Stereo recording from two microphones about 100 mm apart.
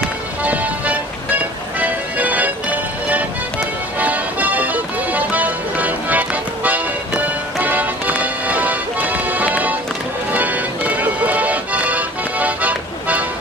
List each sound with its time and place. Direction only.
0.4 s music: 15° right (ahead or behind)